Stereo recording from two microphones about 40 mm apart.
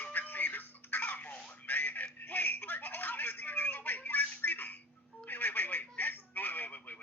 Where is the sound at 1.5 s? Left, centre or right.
Left.